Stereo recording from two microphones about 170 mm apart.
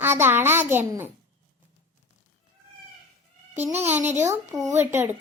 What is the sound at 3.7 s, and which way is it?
Speech, 40° right (ahead or behind).